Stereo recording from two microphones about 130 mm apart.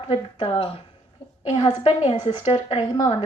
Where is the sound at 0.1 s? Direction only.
40° left (ahead or behind).